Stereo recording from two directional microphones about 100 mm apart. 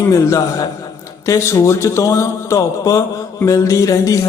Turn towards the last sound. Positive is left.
turn(degrees=30)  # may be behind; listen again after turning